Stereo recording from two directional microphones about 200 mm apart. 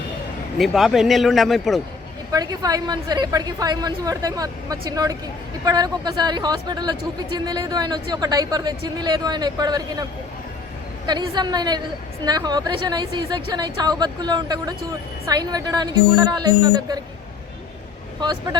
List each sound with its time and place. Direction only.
0.6 s speech: centre (ahead or behind)
2.3 s speech: 20° right (ahead or behind)